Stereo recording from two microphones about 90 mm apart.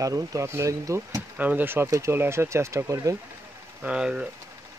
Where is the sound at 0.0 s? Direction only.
40° right (ahead or behind).